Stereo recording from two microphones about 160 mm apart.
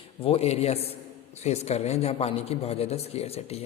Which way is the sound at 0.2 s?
35° left (ahead or behind).